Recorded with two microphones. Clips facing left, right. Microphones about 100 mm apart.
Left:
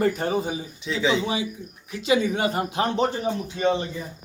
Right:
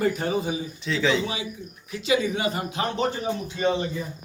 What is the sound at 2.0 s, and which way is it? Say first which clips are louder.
Speech: left 2 dB; 50° left (ahead or behind).